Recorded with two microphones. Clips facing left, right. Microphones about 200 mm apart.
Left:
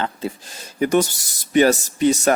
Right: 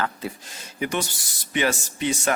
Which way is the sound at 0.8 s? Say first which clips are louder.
Left 9 dB; 40° left (ahead or behind).